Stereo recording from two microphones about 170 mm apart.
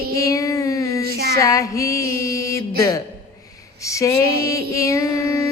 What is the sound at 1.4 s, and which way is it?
Mantra, 20° left (ahead or behind).